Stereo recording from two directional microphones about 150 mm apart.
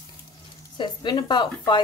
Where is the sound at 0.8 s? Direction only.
30° left (ahead or behind).